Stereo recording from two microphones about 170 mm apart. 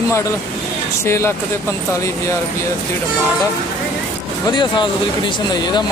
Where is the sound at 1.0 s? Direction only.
15° left (ahead or behind).